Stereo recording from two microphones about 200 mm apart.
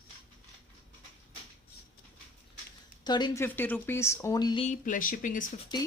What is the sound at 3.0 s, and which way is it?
Speech, 20° left (ahead or behind).